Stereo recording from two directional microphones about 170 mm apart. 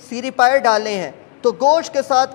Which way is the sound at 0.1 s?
10° left (ahead or behind).